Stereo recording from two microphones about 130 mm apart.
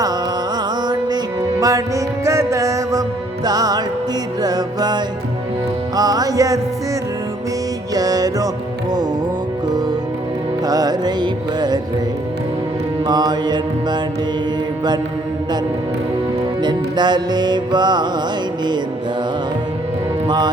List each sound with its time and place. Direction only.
0.9 s music: 30° right (ahead or behind)
7.9 s music: 30° right (ahead or behind)
10.7 s music: 30° right (ahead or behind)
13.1 s mantra: 30° right (ahead or behind)
16.6 s music: 35° right (ahead or behind)
20.2 s speech: 35° right (ahead or behind)